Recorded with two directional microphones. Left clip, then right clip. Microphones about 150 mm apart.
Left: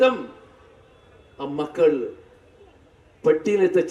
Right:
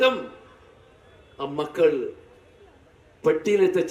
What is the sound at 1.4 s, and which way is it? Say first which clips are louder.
Speech: left 1 dB; 15° right (ahead or behind).